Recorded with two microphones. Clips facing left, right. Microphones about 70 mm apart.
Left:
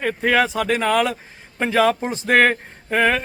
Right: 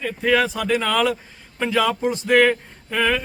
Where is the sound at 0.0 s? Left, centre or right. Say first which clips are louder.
Left 1 dB; left.